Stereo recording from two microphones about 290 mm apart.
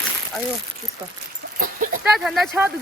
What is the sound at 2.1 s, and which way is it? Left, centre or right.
Speech, centre.